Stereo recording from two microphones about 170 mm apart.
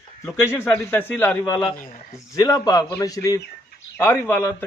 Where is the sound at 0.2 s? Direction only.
15° left (ahead or behind).